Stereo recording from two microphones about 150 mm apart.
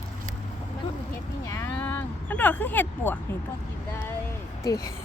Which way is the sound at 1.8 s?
10° left (ahead or behind).